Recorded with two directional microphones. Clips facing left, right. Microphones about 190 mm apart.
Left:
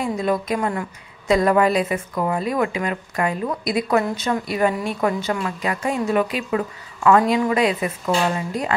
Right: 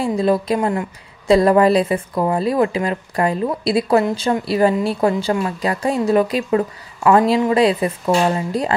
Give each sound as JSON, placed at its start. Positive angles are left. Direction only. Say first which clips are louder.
{"t": 0.0, "sound": "a woman's voice", "louder": "right 5 dB", "side_deg": -30}